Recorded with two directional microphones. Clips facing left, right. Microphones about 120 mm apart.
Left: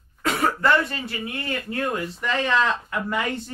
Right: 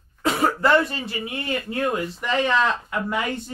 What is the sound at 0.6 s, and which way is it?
Speech, 10° right (ahead or behind).